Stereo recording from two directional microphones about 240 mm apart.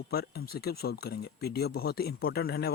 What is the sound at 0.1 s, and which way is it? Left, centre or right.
Speech, left.